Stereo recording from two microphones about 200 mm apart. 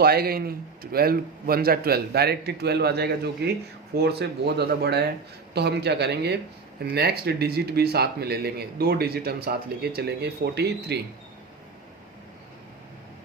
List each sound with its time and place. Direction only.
0.0 s speech: 50° right (ahead or behind)